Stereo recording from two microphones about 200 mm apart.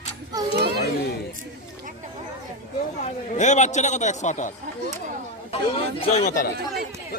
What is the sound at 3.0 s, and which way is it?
Speech, 35° left (ahead or behind).